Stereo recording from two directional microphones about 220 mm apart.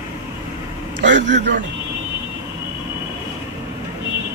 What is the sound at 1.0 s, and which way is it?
Speech, 55° right (ahead or behind).